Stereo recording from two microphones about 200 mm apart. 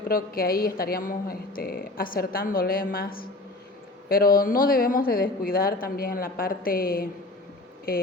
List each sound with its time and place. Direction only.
0.1 s a woman's voice: 45° left (ahead or behind)